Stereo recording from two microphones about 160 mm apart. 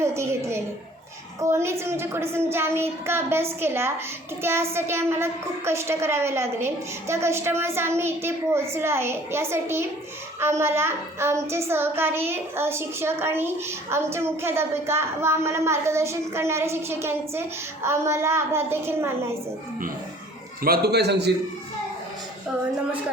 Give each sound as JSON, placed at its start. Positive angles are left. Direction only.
{"t": 0.0, "sound": "a woman's voice", "side_deg": -15}
{"t": 20.6, "sound": "a man's voice", "side_deg": -75}